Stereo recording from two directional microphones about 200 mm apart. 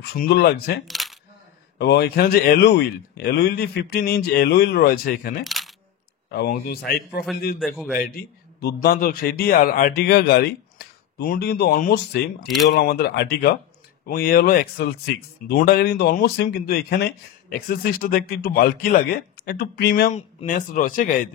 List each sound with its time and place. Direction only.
0.0 s speech: 55° left (ahead or behind)
0.8 s coin: centre (ahead or behind)
1.8 s speech: 55° left (ahead or behind)
5.4 s coin: centre (ahead or behind)
6.3 s speech: 50° left (ahead or behind)
7.5 s a man's voice: centre (ahead or behind)
8.0 s a man's voice: 50° left (ahead or behind)
20.1 s a man's voice: 35° left (ahead or behind)